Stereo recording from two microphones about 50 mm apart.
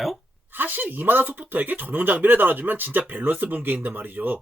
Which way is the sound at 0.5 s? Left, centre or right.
Right.